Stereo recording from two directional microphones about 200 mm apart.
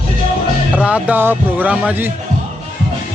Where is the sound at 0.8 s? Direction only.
5° right (ahead or behind).